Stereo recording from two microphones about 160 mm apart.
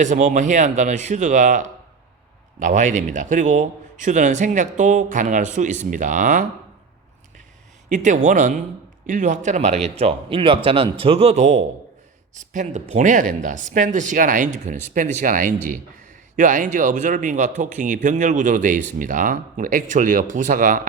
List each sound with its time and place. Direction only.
0.0 s a man's voice: 50° right (ahead or behind)
7.9 s a man's voice: 50° right (ahead or behind)